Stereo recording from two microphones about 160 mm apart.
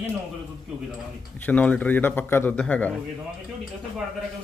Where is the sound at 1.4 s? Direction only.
10° left (ahead or behind).